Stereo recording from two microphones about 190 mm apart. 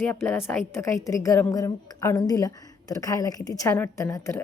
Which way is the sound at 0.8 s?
15° left (ahead or behind).